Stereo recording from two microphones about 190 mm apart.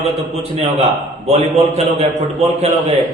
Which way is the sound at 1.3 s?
35° right (ahead or behind).